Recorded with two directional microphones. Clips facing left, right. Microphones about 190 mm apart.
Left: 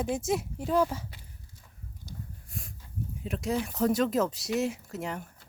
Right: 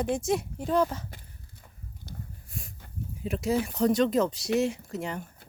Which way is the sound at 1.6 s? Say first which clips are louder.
Right 2 dB; 60° right (ahead or behind).